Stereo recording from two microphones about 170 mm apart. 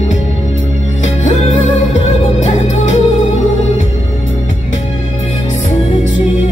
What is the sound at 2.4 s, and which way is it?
Music, 40° left (ahead or behind).